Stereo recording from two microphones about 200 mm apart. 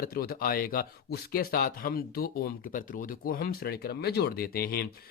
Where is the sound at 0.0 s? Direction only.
50° left (ahead or behind).